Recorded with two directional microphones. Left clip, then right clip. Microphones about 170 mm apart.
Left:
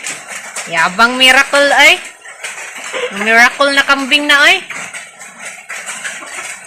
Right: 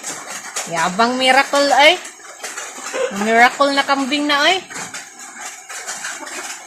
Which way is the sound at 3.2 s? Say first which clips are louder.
Left 4 dB; 5° left (ahead or behind).